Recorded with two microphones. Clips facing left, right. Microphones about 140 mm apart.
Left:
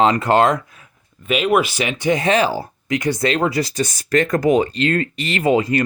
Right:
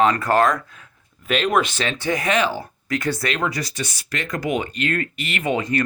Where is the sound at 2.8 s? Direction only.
15° left (ahead or behind).